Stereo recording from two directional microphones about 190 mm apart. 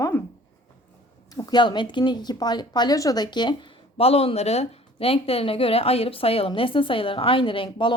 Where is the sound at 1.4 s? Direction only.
25° left (ahead or behind).